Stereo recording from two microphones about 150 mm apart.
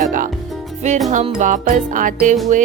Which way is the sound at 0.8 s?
50° right (ahead or behind).